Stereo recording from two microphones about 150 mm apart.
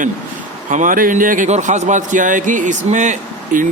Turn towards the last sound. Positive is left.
turn(degrees=-60)  # may be behind; listen again after turning